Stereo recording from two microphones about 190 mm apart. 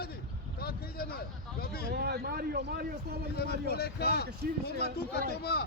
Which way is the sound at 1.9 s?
55° right (ahead or behind).